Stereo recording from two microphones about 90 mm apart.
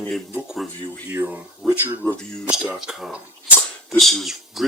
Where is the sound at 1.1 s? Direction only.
20° right (ahead or behind).